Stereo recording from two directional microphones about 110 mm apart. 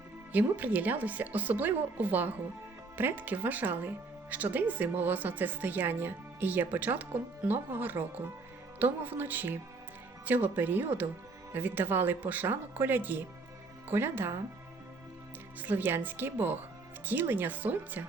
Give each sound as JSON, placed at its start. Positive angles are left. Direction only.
{"t": 0.3, "sound": "speech", "side_deg": -15}
{"t": 15.6, "sound": "speech", "side_deg": -15}